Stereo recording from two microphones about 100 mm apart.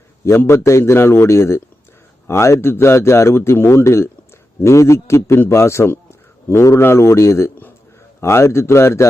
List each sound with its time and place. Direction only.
0.3 s a man's voice: 25° left (ahead or behind)